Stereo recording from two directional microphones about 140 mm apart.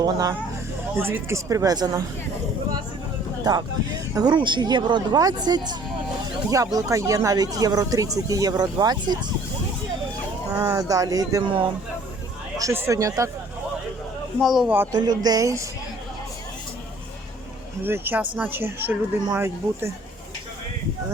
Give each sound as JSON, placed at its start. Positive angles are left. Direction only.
{"t": 0.0, "sound": "speech", "side_deg": -25}
{"t": 4.1, "sound": "speech", "side_deg": -30}
{"t": 10.5, "sound": "speech", "side_deg": -15}
{"t": 12.5, "sound": "speech", "side_deg": -20}
{"t": 14.4, "sound": "speech", "side_deg": -5}
{"t": 14.9, "sound": "speech", "side_deg": -30}
{"t": 17.8, "sound": "speech", "side_deg": -15}